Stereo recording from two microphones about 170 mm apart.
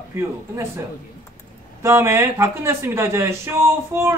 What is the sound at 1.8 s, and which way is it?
Speech, 15° right (ahead or behind).